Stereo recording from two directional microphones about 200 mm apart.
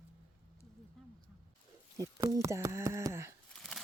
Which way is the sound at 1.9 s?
15° right (ahead or behind).